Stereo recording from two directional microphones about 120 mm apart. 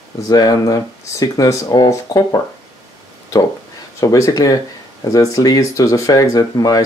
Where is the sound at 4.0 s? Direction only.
30° left (ahead or behind).